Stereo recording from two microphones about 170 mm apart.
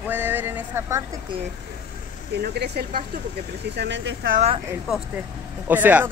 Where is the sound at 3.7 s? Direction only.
85° right.